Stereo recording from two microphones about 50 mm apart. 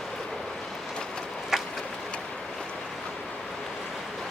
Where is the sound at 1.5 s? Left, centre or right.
Centre.